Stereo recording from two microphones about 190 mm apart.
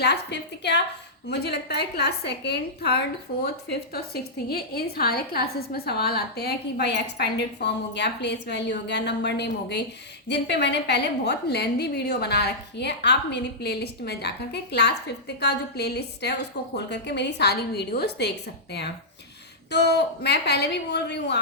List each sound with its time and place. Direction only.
0.0 s a woman's voice: 60° left (ahead or behind)